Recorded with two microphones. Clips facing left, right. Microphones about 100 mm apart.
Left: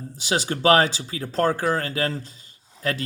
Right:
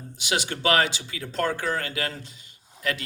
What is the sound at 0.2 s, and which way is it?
Speech, 35° left (ahead or behind).